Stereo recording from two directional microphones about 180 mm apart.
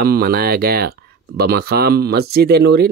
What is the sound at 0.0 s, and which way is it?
Speech, 60° right (ahead or behind).